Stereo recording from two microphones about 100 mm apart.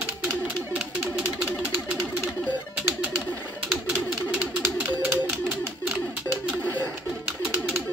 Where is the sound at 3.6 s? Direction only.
5° right (ahead or behind).